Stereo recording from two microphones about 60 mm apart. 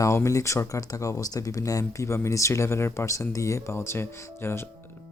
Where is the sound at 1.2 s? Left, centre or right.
Left.